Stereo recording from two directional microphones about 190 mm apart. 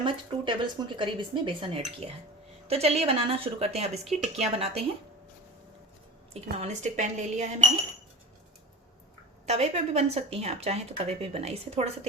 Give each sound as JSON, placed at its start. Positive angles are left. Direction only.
{"t": 0.0, "sound": "speech", "side_deg": -25}
{"t": 6.3, "sound": "speech", "side_deg": -35}
{"t": 9.5, "sound": "speech", "side_deg": -35}